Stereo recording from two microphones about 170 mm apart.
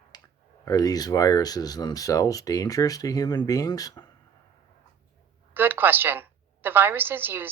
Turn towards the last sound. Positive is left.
turn(degrees=-10)  # may be behind; listen again after turning